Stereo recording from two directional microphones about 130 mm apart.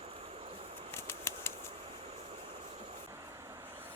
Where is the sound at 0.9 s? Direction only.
20° left (ahead or behind).